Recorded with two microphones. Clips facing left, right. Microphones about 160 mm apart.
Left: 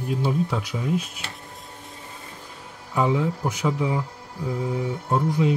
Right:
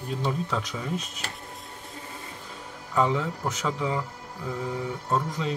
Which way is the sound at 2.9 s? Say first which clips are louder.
Left 2 dB; 10° left (ahead or behind).